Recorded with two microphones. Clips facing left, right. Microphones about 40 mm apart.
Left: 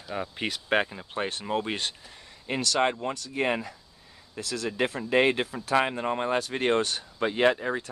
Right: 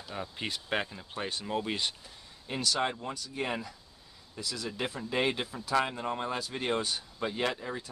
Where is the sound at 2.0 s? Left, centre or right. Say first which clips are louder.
Left 7 dB; left.